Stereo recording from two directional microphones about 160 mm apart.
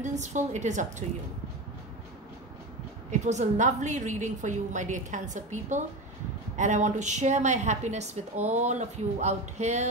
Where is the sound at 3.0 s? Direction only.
50° right (ahead or behind).